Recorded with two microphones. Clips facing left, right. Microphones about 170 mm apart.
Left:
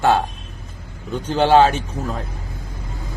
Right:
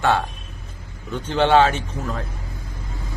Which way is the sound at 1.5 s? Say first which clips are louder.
Left 3 dB; 30° left (ahead or behind).